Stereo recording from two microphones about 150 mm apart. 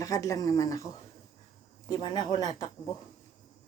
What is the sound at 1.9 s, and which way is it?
Speech, 30° left (ahead or behind).